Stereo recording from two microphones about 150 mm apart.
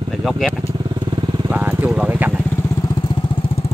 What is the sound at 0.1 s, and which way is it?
Speech, centre (ahead or behind).